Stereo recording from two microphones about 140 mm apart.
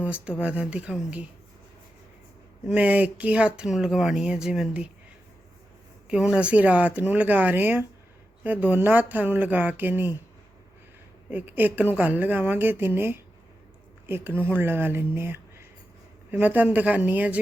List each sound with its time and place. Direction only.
0.0 s speech: 10° right (ahead or behind)
2.6 s speech: 10° right (ahead or behind)
6.1 s speech: 10° right (ahead or behind)
11.3 s speech: 10° right (ahead or behind)